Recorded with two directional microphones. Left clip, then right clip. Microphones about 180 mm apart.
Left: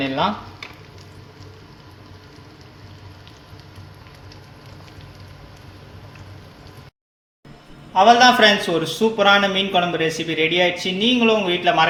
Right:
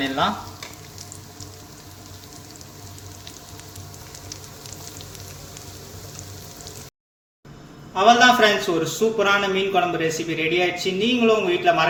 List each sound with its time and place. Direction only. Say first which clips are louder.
7.9 s a man's voice: left 2 dB; 35° left (ahead or behind)